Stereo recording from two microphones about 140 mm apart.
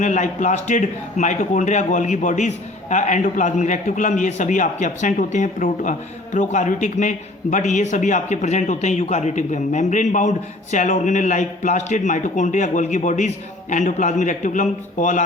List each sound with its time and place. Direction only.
0.0 s a man's voice: 65° left (ahead or behind)